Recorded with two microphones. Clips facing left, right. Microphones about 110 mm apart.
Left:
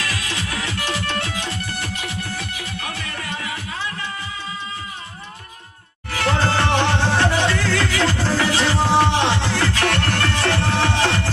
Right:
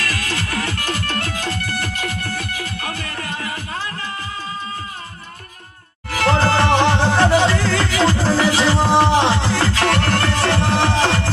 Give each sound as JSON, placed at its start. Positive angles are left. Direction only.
{"t": 0.1, "sound": "music", "side_deg": -45}
{"t": 6.1, "sound": "music", "side_deg": -35}